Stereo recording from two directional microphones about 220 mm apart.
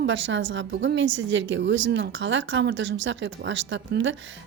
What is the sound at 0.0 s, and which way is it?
A woman's voice, 55° right (ahead or behind).